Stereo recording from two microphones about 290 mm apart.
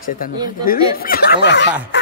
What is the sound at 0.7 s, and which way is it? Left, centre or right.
Speech, left.